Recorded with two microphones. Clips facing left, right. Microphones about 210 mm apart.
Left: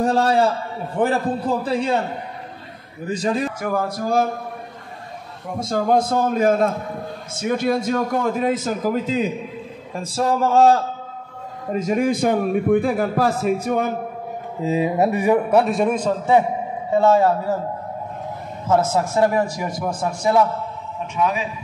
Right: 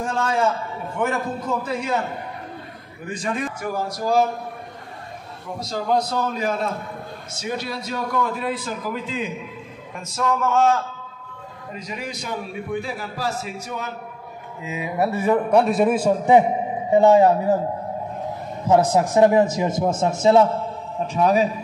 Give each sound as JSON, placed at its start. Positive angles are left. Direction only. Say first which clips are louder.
{"t": 0.0, "sound": "a man's voice", "louder": "left 5 dB", "side_deg": 35}
{"t": 3.1, "sound": "a man's voice", "louder": "left 5 dB", "side_deg": 35}
{"t": 3.6, "sound": "speech", "louder": "left 2 dB", "side_deg": 55}
{"t": 5.6, "sound": "a man's voice", "louder": "left 4 dB", "side_deg": 50}
{"t": 11.7, "sound": "a man's voice", "louder": "left 13 dB", "side_deg": 45}
{"t": 14.6, "sound": "a man's voice", "louder": "left 10 dB", "side_deg": 35}
{"t": 15.0, "sound": "a man's voice", "louder": "right 1 dB", "side_deg": 15}
{"t": 18.7, "sound": "a man's voice", "louder": "right 2 dB", "side_deg": -15}
{"t": 21.1, "sound": "a man's voice", "louder": "right 4 dB", "side_deg": -40}